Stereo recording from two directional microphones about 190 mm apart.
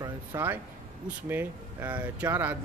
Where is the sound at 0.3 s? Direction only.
15° right (ahead or behind).